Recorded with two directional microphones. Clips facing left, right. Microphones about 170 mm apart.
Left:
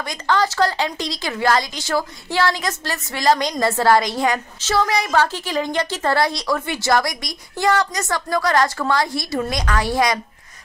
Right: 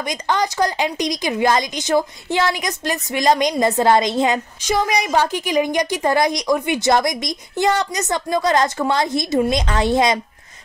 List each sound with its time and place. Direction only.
0.1 s a woman's voice: 20° right (ahead or behind)